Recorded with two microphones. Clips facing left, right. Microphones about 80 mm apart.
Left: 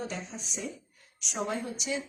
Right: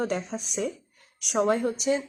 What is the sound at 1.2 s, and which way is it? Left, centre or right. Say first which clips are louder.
Speech: right 10 dB; right.